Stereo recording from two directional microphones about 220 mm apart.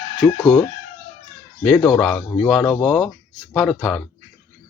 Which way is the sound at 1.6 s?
Centre (ahead or behind).